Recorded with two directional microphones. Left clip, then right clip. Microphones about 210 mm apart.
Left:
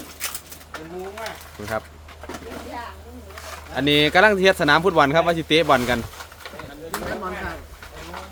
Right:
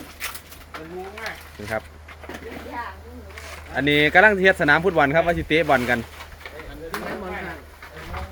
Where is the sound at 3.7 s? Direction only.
10° left (ahead or behind).